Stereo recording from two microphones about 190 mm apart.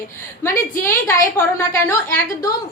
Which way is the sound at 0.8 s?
15° left (ahead or behind).